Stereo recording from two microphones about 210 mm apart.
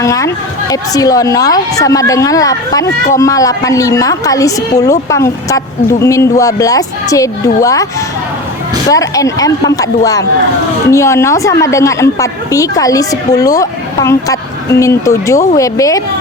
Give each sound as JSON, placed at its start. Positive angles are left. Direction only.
{"t": 0.0, "sound": "a woman's voice", "side_deg": 15}
{"t": 8.9, "sound": "a woman's voice", "side_deg": 15}